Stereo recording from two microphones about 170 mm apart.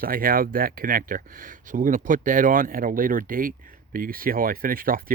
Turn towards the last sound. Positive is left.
turn(degrees=-55)  # may be behind; listen again after turning